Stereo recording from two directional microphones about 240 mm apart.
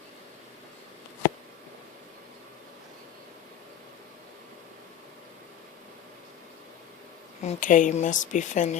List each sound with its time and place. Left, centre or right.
7.4 s speech: left